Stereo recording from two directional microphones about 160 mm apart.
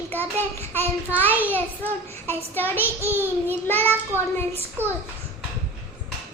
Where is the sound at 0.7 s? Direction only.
10° left (ahead or behind).